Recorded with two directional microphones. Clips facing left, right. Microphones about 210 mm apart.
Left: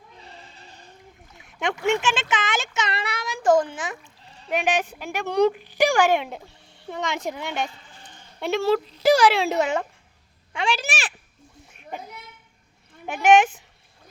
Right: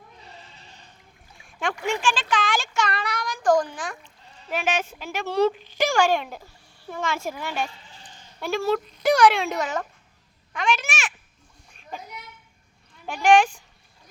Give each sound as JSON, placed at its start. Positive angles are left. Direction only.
{"t": 1.4, "sound": "a child's voice", "side_deg": 20}
{"t": 13.2, "sound": "speech", "side_deg": 20}